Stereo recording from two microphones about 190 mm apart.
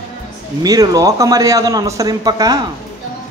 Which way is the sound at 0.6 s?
20° right (ahead or behind).